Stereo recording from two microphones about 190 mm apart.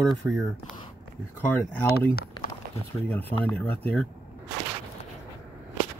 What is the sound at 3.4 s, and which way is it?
Speech, 10° left (ahead or behind).